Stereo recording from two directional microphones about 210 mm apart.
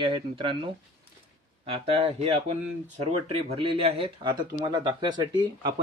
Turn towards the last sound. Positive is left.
turn(degrees=-20)  # may be behind; listen again after turning